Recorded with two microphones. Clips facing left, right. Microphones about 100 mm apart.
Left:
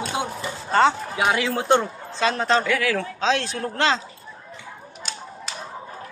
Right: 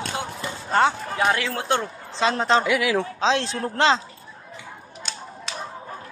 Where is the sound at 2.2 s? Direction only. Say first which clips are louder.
Right 1 dB; 20° right (ahead or behind).